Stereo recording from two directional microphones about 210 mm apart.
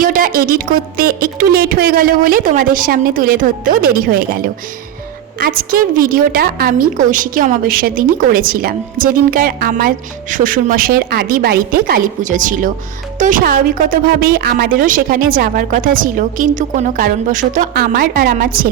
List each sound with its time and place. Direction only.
0.0 s a woman's voice: 40° right (ahead or behind)